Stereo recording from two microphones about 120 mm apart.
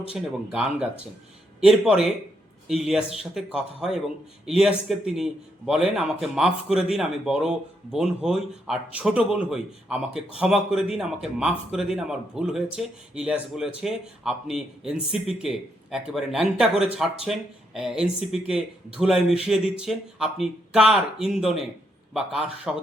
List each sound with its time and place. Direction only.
0.1 s speech: 5° right (ahead or behind)